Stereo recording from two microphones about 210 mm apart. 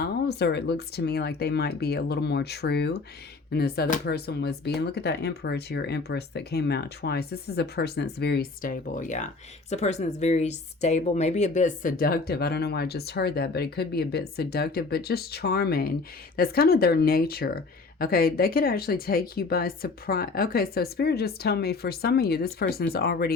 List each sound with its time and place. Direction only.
0.0 s speech: 50° left (ahead or behind)